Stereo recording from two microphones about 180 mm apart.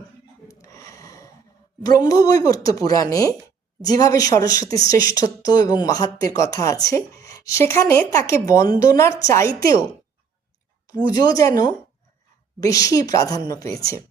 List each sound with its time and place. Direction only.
0.4 s snort: 15° left (ahead or behind)
1.8 s a woman's voice: 20° left (ahead or behind)
11.1 s speech: 20° left (ahead or behind)
12.5 s speech: 20° left (ahead or behind)